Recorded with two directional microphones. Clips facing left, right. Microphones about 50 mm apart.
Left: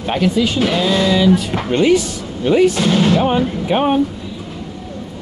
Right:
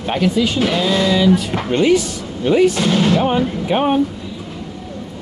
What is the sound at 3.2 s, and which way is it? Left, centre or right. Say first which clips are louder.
Speech: left 1 dB; left.